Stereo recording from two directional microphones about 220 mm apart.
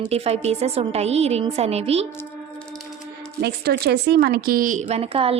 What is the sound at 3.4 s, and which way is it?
A woman's voice, 45° right (ahead or behind).